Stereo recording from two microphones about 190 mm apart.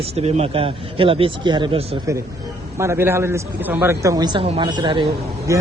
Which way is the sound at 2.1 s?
15° right (ahead or behind).